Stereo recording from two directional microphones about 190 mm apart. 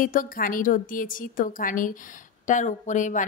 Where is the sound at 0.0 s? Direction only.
45° left (ahead or behind).